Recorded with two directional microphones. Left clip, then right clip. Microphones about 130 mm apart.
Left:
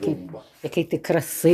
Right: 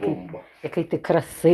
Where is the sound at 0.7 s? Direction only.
40° left (ahead or behind).